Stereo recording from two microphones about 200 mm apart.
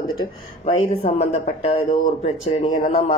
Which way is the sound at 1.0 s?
30° left (ahead or behind).